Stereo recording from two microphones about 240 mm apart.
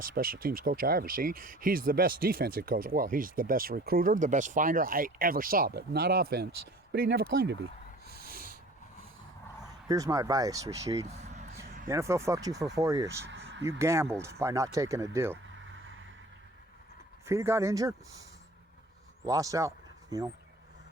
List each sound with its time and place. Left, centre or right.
0.0 s speech: right
8.0 s snort: right
9.9 s speech: centre
13.3 s a sound: right
13.7 s speech: centre
17.2 s speech: centre